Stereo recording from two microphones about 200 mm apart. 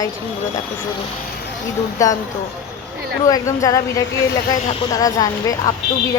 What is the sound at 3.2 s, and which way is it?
A woman's voice, 15° left (ahead or behind).